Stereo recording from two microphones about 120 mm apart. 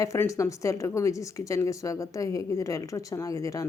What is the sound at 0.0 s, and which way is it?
Speech, 25° left (ahead or behind).